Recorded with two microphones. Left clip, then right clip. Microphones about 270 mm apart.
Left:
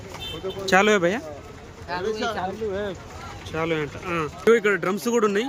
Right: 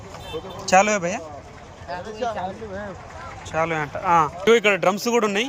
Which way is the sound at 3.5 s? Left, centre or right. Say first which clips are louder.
Right 3 dB; centre.